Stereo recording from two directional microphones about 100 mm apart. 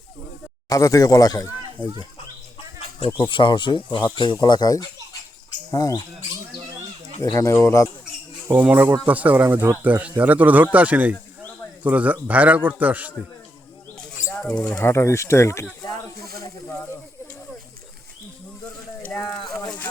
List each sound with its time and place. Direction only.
0.7 s speech: 35° left (ahead or behind)
3.2 s speech: 55° left (ahead or behind); by 6.0 s 35° left (ahead or behind)
7.2 s speech: 30° left (ahead or behind)
8.5 s a man's voice: 15° right (ahead or behind)
14.3 s speech: 10° left (ahead or behind)
14.8 s speech: 25° left (ahead or behind)